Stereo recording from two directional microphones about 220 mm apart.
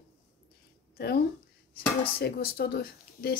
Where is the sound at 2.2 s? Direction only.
45° left (ahead or behind).